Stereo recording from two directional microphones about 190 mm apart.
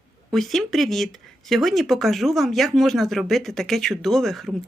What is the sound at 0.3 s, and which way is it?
A woman's voice, centre (ahead or behind).